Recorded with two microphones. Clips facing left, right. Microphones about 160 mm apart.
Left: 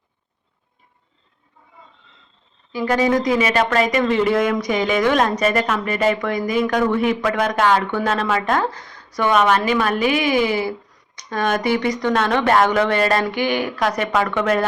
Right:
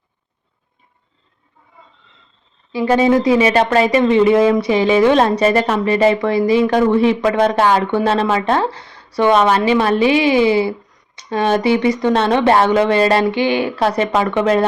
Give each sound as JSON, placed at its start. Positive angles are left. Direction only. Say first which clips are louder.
{"t": 2.7, "sound": "speech", "louder": "right 5 dB", "side_deg": -25}